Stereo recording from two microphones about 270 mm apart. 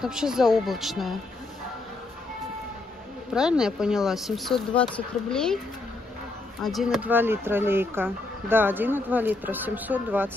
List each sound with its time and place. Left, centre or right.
0.0 s speech: centre
3.3 s speech: centre
6.6 s speech: centre